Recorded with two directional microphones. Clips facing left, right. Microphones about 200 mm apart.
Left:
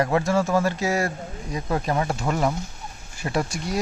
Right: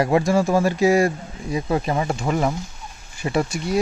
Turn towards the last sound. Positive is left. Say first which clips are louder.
# right 4 dB
turn(degrees=0)  # may be behind; listen again after turning